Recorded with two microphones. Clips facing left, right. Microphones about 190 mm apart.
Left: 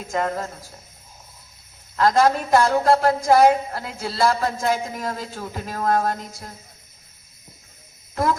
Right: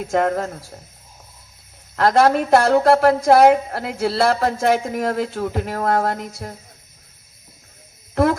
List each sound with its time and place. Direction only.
0.0 s a woman's voice: 60° right (ahead or behind)
2.0 s a woman's voice: 65° right (ahead or behind)
8.1 s a sound: 65° right (ahead or behind)